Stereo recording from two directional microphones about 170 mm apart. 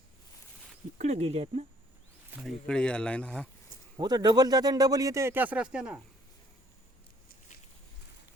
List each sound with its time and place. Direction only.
0.9 s speech: 40° right (ahead or behind)
2.3 s speech: centre (ahead or behind)
3.9 s speech: 25° right (ahead or behind); by 6.0 s 5° right (ahead or behind)